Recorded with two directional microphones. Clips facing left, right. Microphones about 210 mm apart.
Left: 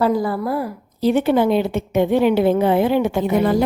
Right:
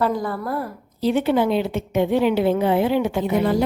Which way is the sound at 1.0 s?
45° left (ahead or behind).